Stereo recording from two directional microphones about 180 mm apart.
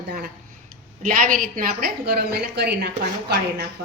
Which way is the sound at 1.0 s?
45° right (ahead or behind).